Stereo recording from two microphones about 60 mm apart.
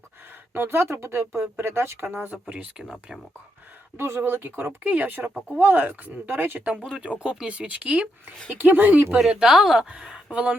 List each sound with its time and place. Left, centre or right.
0.5 s speech: right
2.5 s speech: right
3.9 s speech: right
7.2 s speech: centre
9.3 s speech: centre
10.0 s a sound: centre
10.3 s speech: centre